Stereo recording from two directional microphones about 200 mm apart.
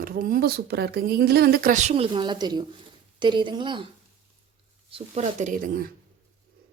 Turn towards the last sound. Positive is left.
turn(degrees=-45)  # may be behind; listen again after turning